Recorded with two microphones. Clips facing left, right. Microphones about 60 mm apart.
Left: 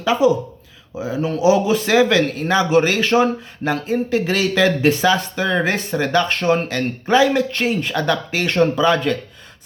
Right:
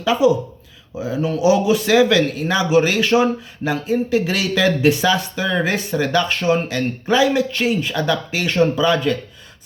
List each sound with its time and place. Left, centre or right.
0.0 s speech: left